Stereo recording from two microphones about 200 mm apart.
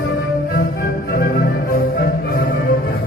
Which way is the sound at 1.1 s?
45° left (ahead or behind).